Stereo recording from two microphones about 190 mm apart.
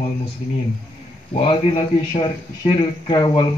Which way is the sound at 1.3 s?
30° left (ahead or behind).